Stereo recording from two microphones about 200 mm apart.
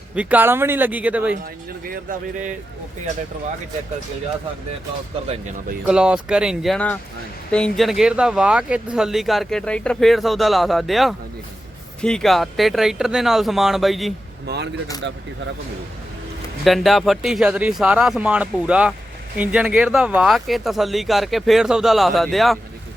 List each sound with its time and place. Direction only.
0.2 s speech: 10° right (ahead or behind)
1.8 s speech: 45° right (ahead or behind)
5.8 s speech: 5° right (ahead or behind)
14.4 s speech: 55° right (ahead or behind)
16.6 s speech: centre (ahead or behind)